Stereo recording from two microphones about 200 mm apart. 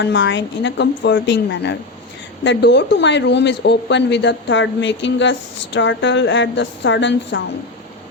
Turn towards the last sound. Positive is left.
turn(degrees=65)  # may be behind; listen again after turning